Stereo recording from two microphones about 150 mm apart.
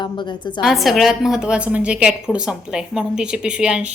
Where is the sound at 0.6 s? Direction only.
Centre (ahead or behind).